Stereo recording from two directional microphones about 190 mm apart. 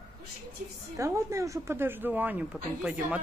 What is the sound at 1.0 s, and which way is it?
A woman's voice, 15° right (ahead or behind).